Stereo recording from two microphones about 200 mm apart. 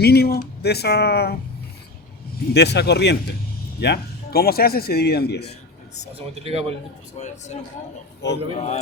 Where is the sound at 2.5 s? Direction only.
55° left (ahead or behind).